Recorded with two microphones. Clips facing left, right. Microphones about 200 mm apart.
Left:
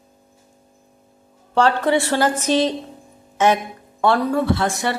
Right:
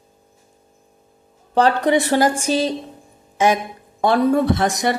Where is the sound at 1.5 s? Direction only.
15° right (ahead or behind).